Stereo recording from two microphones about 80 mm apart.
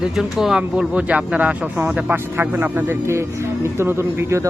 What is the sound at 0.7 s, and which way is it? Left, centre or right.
A man's voice, centre.